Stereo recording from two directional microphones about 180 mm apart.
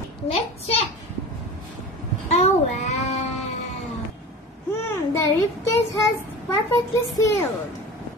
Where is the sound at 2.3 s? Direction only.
40° left (ahead or behind).